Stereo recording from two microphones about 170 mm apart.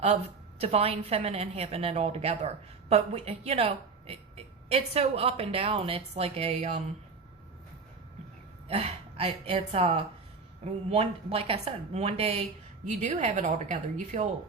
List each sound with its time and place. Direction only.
0.6 s a woman's voice: 35° right (ahead or behind)
8.6 s a woman's voice: 35° right (ahead or behind)